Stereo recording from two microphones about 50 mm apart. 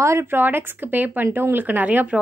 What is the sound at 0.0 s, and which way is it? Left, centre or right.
Speech, right.